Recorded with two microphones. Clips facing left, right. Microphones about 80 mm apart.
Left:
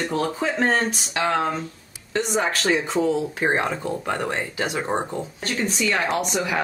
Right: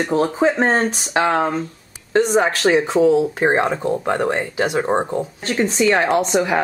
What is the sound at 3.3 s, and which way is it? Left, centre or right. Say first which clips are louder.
Speech: right 5 dB; right.